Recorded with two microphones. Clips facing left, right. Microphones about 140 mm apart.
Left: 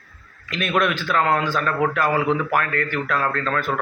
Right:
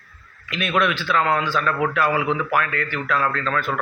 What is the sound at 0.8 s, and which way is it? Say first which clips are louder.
A man's voice: even; 45° left (ahead or behind).